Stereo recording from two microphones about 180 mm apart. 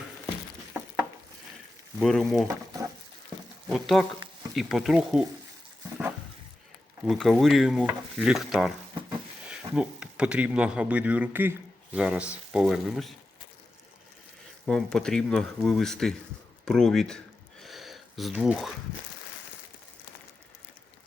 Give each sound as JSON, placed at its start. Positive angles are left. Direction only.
{"t": 2.0, "sound": "stir", "side_deg": 0}
{"t": 3.7, "sound": "stir", "side_deg": 0}
{"t": 7.0, "sound": "stir", "side_deg": 0}
{"t": 9.5, "sound": "speech", "side_deg": -5}
{"t": 14.7, "sound": "stir", "side_deg": 5}
{"t": 17.6, "sound": "a sound", "side_deg": 0}